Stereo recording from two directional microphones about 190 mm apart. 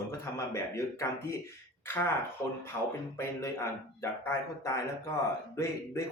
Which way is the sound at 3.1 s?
15° left (ahead or behind).